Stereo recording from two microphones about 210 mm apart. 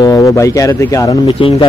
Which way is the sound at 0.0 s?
15° left (ahead or behind).